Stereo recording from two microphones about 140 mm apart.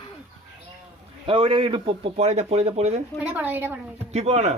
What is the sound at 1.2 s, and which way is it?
Speech, 40° right (ahead or behind).